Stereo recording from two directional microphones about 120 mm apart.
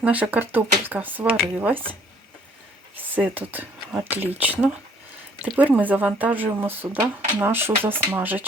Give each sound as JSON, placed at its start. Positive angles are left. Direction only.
{"t": 0.0, "sound": "speech", "side_deg": -15}
{"t": 3.2, "sound": "speech", "side_deg": -15}